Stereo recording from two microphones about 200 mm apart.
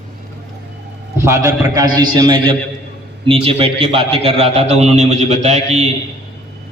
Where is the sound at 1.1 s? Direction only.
15° right (ahead or behind); by 5.8 s 35° right (ahead or behind).